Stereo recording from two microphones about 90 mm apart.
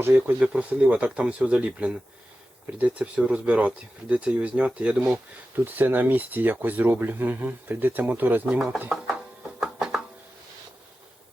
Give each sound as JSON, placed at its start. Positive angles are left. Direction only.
{"t": 0.0, "sound": "speech", "side_deg": -25}
{"t": 0.3, "sound": "speech", "side_deg": -10}
{"t": 9.6, "sound": "music", "side_deg": -5}